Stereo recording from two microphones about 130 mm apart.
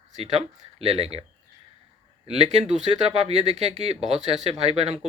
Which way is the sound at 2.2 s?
50° right (ahead or behind).